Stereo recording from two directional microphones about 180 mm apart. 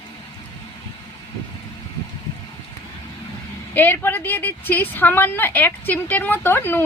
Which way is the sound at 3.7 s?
10° left (ahead or behind).